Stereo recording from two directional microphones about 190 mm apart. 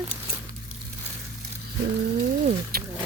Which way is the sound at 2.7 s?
55° right (ahead or behind).